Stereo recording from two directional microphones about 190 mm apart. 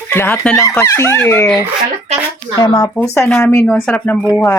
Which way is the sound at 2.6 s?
20° left (ahead or behind).